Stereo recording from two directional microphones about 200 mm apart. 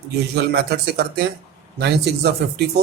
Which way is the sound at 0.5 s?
55° right (ahead or behind).